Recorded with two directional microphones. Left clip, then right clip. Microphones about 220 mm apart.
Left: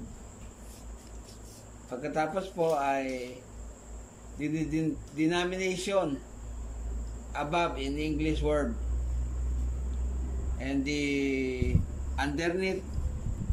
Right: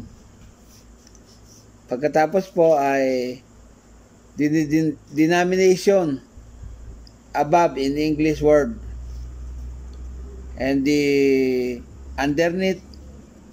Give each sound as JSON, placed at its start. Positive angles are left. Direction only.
{"t": 1.9, "sound": "speech", "side_deg": -40}
{"t": 4.4, "sound": "speech", "side_deg": -35}
{"t": 7.3, "sound": "speech", "side_deg": -35}
{"t": 10.6, "sound": "speech", "side_deg": -40}